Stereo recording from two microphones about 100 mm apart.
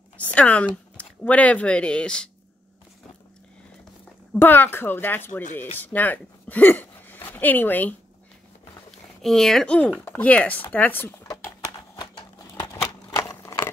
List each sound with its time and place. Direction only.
0.2 s speech: 15° left (ahead or behind)
4.4 s speech: 20° left (ahead or behind)
9.2 s speech: 5° left (ahead or behind); by 11.1 s 20° left (ahead or behind)
12.0 s a sound: 50° left (ahead or behind)